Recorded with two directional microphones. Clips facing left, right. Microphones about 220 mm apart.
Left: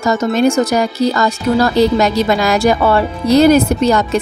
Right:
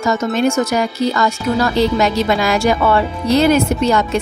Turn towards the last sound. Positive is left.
turn(degrees=40)  # may be behind; listen again after turning